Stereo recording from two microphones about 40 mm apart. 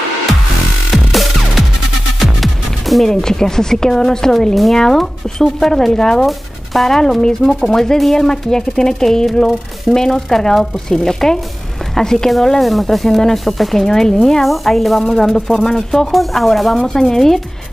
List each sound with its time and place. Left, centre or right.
0.9 s music: centre
3.1 s a woman's voice: centre
13.8 s a woman's voice: centre